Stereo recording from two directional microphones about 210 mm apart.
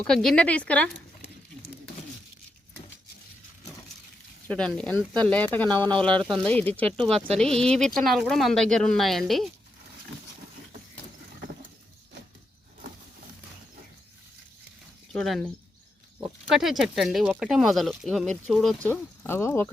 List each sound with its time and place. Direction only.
0.0 s speech: 5° left (ahead or behind)
4.4 s speech: 5° left (ahead or behind)
15.1 s speech: 5° left (ahead or behind)
16.6 s speech: centre (ahead or behind)